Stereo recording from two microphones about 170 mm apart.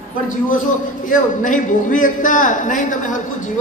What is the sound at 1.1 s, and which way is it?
A man's voice, 50° left (ahead or behind).